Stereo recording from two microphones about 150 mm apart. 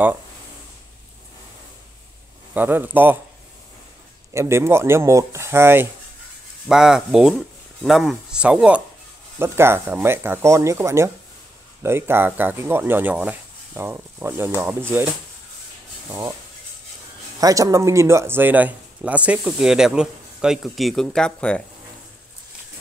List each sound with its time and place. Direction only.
2.5 s speech: 10° right (ahead or behind)
4.3 s speech: 20° right (ahead or behind)
6.7 s speech: 5° right (ahead or behind)
16.1 s speech: 25° right (ahead or behind)
17.4 s speech: 25° right (ahead or behind); by 21.6 s 5° left (ahead or behind)